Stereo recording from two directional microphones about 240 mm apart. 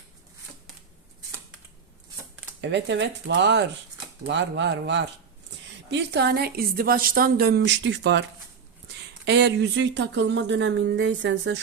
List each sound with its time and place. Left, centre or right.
2.6 s a woman's voice: right